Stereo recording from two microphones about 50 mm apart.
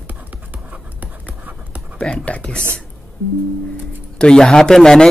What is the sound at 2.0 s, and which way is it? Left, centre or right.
Speech, left.